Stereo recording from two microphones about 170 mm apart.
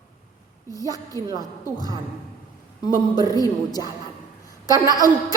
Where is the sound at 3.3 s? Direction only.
20° left (ahead or behind).